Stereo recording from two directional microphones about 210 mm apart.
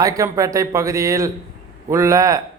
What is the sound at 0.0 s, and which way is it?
A man's voice, 15° right (ahead or behind).